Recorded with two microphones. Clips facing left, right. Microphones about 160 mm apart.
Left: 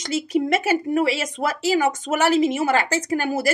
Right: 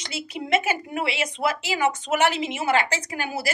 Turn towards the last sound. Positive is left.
turn(degrees=45)  # may be behind; listen again after turning